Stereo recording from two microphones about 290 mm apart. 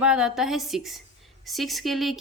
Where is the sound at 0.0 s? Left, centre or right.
Centre.